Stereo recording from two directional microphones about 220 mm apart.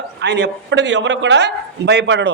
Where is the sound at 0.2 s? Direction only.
50° right (ahead or behind).